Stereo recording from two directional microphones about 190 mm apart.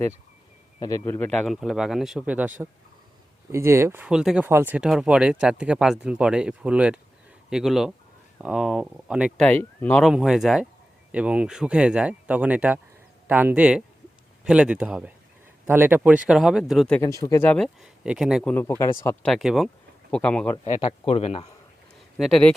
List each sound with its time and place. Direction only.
0.8 s speech: 15° left (ahead or behind); by 2.5 s 5° right (ahead or behind)
3.5 s speech: 15° right (ahead or behind)
9.5 s speech: 10° left (ahead or behind)
10.0 s speech: centre (ahead or behind)
17.0 s speech: 20° left (ahead or behind); by 18.5 s centre (ahead or behind)
18.5 s speech: 15° left (ahead or behind)
19.3 s speech: centre (ahead or behind)
20.8 s speech: 35° left (ahead or behind)
22.2 s speech: 5° left (ahead or behind)